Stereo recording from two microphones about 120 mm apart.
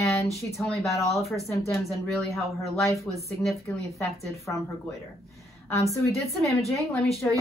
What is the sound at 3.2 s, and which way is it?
Speech, 25° left (ahead or behind).